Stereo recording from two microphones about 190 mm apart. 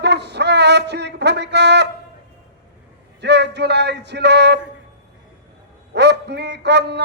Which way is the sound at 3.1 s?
65° right (ahead or behind).